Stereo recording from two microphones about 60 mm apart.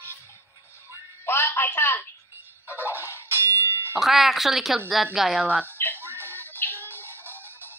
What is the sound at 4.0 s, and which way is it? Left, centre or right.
Speech, centre.